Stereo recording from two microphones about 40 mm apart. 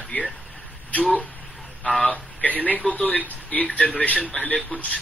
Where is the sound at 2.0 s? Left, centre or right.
Left.